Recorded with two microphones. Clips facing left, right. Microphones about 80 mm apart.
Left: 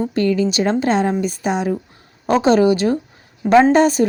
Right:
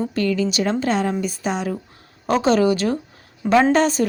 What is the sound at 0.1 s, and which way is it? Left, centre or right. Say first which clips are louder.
A woman's voice: left 4 dB; left.